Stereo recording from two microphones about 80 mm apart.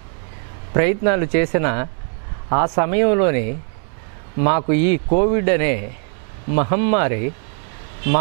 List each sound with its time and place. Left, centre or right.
0.7 s a man's voice: centre